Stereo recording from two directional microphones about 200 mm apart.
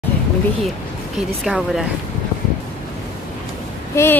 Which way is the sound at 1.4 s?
Centre (ahead or behind).